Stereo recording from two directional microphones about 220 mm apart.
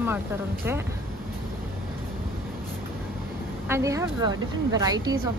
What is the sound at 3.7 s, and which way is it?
Speech, 15° right (ahead or behind).